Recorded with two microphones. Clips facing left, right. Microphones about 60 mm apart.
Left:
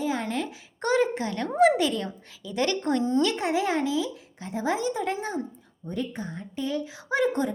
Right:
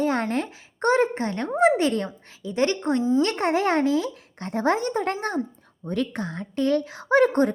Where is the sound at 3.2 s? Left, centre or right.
Right.